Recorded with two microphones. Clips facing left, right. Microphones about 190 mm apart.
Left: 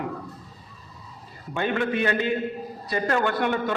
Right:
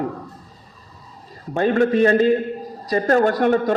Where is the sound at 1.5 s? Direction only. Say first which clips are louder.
Right 8 dB; 40° right (ahead or behind).